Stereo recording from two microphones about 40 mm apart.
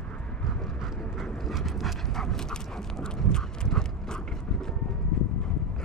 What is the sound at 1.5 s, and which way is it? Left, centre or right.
Dog, centre.